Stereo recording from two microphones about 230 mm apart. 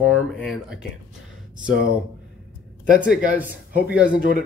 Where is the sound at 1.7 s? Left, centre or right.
Left.